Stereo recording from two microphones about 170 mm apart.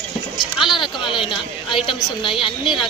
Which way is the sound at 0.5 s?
Centre (ahead or behind).